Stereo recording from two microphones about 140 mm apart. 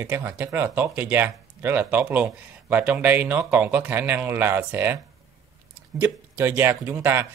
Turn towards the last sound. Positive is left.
turn(degrees=-15)  # may be behind; listen again after turning